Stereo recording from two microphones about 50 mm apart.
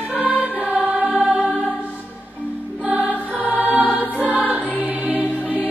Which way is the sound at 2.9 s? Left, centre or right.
Right.